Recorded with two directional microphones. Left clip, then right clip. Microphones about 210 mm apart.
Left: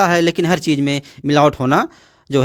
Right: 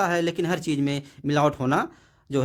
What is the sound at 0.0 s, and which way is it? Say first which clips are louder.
Speech: left 9 dB; 40° left (ahead or behind).